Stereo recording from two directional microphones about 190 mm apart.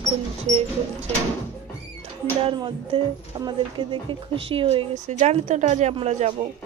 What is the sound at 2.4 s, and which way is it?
Speech, 25° right (ahead or behind).